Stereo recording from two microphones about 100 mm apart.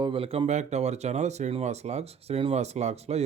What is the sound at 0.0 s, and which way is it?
Speech, 65° right (ahead or behind).